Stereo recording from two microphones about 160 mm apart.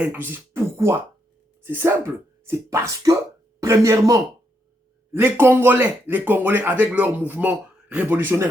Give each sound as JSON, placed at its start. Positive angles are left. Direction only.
{"t": 0.0, "sound": "speech", "side_deg": -10}